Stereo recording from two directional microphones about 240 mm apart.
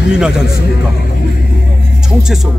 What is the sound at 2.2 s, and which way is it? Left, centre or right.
Speech, centre.